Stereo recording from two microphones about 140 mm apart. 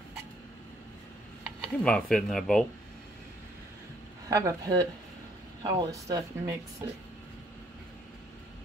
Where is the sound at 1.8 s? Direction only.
5° left (ahead or behind).